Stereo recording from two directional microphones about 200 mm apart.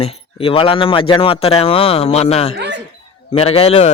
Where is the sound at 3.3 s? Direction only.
30° left (ahead or behind).